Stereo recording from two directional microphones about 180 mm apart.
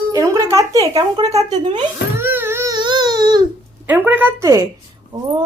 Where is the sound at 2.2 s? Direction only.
10° right (ahead or behind).